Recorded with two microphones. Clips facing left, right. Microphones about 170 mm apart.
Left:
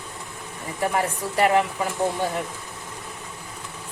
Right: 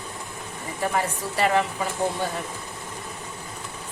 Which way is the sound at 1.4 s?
15° left (ahead or behind).